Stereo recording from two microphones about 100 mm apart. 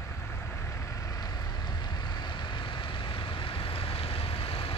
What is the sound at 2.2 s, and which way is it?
Vehicle, 50° left (ahead or behind).